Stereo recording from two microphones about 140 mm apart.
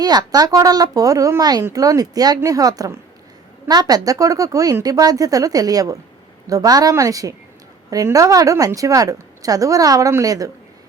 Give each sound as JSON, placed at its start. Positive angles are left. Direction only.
{"t": 0.0, "sound": "a woman's voice", "side_deg": -30}